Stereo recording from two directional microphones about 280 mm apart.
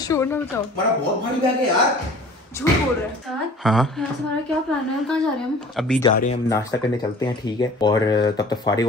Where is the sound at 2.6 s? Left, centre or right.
Centre.